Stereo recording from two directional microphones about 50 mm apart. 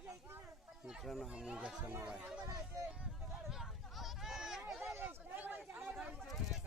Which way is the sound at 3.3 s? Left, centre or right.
Centre.